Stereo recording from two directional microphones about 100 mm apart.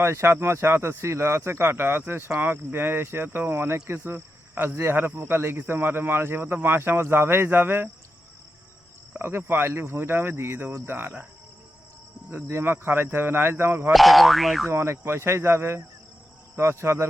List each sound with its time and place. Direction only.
0.0 s speech: 25° right (ahead or behind)
9.1 s speech: 25° right (ahead or behind)
12.3 s speech: 25° right (ahead or behind)
13.9 s boing: centre (ahead or behind)
14.7 s speech: 25° right (ahead or behind)